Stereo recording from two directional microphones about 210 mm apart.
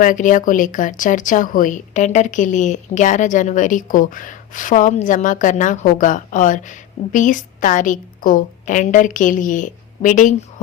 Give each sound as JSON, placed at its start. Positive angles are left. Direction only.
{"t": 0.0, "sound": "speech", "side_deg": 40}